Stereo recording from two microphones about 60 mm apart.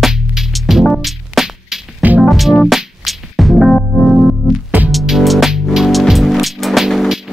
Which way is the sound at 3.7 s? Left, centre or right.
Centre.